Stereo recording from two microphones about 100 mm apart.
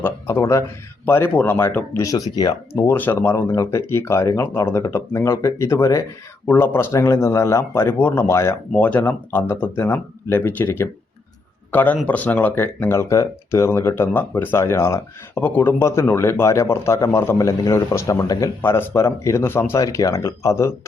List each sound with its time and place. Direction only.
0.0 s speech: 25° left (ahead or behind)
2.4 s speech: 45° left (ahead or behind)
2.7 s speech: 20° left (ahead or behind)
8.7 s speech: 15° left (ahead or behind); by 18.5 s 35° left (ahead or behind)
18.6 s speech: 25° left (ahead or behind)